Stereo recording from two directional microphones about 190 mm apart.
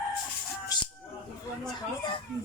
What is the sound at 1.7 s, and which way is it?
Speech, 25° left (ahead or behind).